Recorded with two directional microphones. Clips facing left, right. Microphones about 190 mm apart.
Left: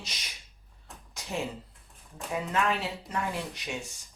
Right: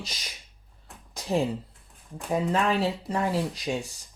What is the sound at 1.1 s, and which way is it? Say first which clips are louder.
Speech: right 8 dB; 35° right (ahead or behind).